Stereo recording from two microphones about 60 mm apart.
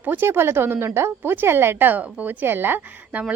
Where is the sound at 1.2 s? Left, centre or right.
Right.